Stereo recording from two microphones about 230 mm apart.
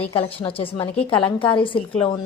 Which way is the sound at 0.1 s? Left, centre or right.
Left.